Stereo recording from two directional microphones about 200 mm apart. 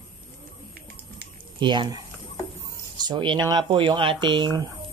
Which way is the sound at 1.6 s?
25° right (ahead or behind).